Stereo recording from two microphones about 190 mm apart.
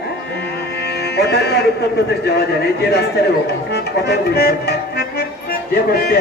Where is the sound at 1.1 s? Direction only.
60° left (ahead or behind).